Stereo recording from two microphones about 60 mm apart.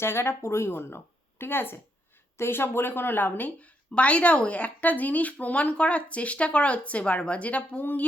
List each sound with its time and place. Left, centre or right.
0.0 s speech: left